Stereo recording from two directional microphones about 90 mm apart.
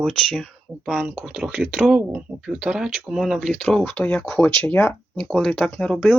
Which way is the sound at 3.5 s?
15° left (ahead or behind).